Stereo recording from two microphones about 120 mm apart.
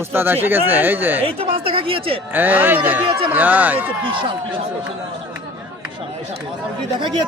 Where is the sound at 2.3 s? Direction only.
15° right (ahead or behind).